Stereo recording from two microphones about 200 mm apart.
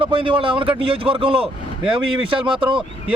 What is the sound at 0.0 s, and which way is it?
Speech, 25° right (ahead or behind).